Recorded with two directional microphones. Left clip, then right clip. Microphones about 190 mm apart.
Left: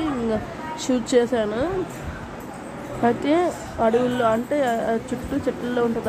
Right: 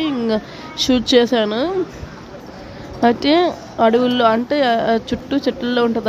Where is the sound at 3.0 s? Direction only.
45° right (ahead or behind).